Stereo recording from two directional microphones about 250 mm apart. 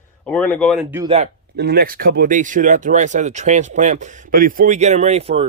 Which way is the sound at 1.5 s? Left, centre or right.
Right.